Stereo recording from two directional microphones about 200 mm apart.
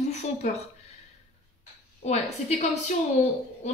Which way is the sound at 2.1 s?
35° left (ahead or behind).